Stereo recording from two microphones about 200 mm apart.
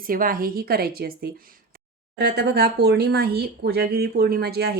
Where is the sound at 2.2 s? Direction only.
55° right (ahead or behind).